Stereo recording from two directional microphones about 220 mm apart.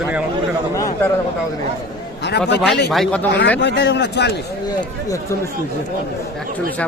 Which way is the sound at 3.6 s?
50° left (ahead or behind).